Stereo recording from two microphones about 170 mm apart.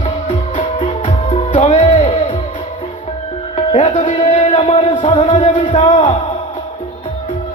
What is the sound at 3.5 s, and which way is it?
Music, 40° left (ahead or behind).